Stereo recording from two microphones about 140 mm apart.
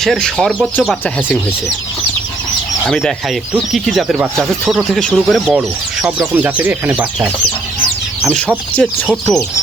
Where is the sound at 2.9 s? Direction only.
Centre (ahead or behind).